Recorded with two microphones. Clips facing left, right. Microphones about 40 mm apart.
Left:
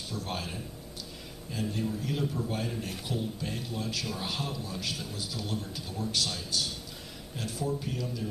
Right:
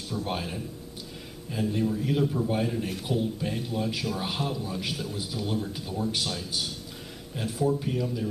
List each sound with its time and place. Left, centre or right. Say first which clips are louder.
0.1 s speech: right 5 dB; centre
4.0 s speech: right 4 dB; centre